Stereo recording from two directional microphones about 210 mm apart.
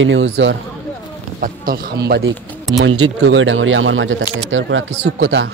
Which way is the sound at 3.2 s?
60° right (ahead or behind).